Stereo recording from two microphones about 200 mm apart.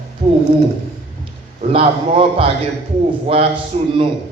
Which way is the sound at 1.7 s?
30° right (ahead or behind).